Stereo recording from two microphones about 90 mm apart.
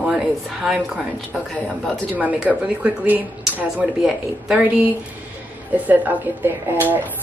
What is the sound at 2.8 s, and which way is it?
Speech, 20° right (ahead or behind).